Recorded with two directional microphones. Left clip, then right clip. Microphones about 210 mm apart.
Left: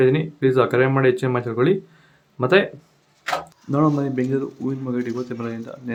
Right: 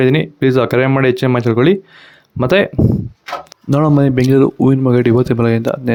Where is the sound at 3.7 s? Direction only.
50° right (ahead or behind).